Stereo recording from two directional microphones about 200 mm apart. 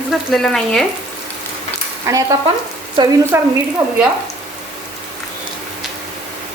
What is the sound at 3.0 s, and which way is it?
Speech, 25° right (ahead or behind).